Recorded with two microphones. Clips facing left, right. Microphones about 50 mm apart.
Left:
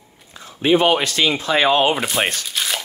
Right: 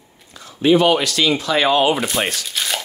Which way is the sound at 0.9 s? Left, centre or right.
Left.